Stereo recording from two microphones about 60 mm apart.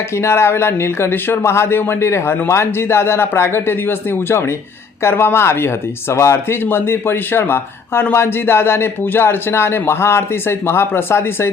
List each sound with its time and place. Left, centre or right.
0.2 s speech: left